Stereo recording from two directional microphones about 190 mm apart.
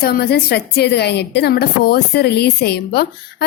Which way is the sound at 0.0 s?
55° left (ahead or behind).